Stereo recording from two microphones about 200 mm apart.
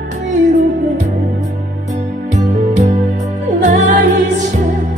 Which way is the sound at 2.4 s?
35° right (ahead or behind).